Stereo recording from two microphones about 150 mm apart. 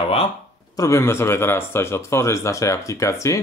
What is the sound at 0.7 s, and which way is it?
Speech, 20° left (ahead or behind).